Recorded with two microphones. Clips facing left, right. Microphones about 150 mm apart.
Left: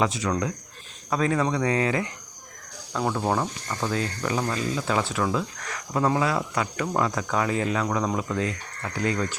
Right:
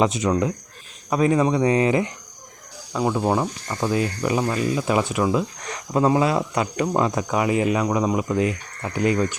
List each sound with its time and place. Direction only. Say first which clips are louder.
0.0 s speech: right 5 dB; 20° right (ahead or behind)